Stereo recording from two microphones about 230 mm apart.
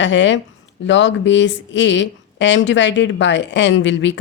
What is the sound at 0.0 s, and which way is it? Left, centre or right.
Speech, left.